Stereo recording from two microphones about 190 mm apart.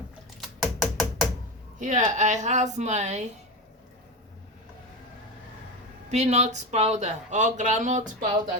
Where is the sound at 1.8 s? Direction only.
40° right (ahead or behind).